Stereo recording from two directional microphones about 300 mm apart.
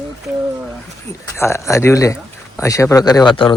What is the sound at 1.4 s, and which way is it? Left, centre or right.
Speech, centre.